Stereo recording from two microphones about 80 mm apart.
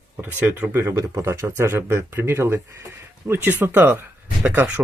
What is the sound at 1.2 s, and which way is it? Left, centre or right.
Speech, right.